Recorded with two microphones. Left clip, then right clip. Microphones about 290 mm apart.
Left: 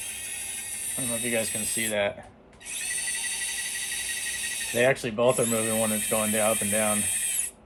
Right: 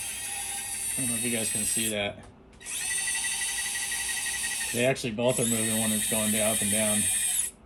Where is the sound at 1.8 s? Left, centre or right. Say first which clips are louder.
Left 5 dB; centre.